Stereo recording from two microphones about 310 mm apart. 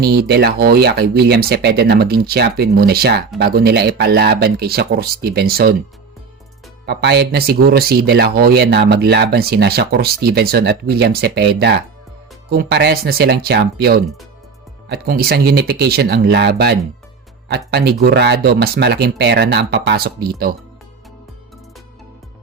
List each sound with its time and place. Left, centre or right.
0.0 s speech: right
6.8 s speech: right